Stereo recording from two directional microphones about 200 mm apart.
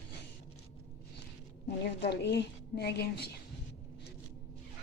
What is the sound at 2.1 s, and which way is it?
Speech, 55° left (ahead or behind).